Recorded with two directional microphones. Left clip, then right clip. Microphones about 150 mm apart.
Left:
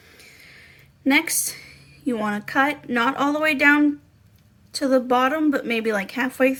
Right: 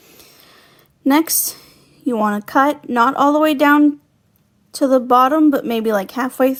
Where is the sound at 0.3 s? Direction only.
35° right (ahead or behind).